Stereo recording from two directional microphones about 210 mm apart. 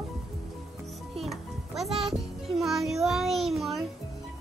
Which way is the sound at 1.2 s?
Centre (ahead or behind).